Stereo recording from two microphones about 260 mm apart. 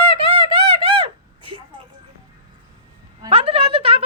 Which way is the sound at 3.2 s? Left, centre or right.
Right.